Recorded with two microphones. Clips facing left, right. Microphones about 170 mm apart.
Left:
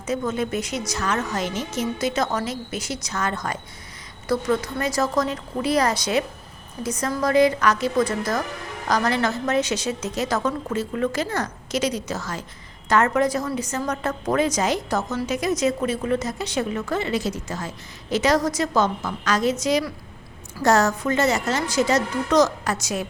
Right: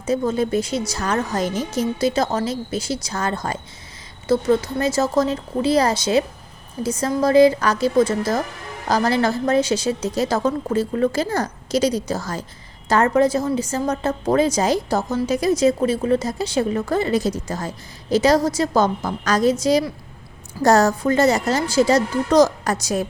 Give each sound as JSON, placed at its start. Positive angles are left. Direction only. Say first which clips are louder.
{"t": 0.0, "sound": "a woman's voice", "louder": "right 4 dB", "side_deg": -30}